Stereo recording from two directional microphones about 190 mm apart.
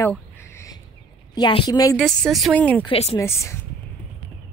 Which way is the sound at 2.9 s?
35° left (ahead or behind).